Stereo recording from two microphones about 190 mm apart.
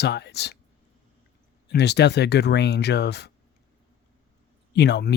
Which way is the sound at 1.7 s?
60° left (ahead or behind).